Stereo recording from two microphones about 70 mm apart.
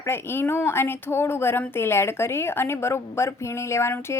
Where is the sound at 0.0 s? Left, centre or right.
Left.